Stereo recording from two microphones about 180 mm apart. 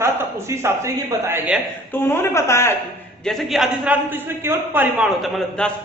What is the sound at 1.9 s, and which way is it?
Speech, 10° left (ahead or behind).